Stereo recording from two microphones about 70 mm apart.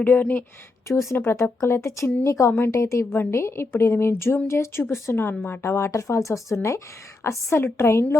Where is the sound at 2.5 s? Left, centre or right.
Left.